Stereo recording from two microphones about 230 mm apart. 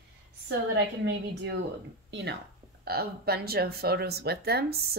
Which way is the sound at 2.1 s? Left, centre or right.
Right.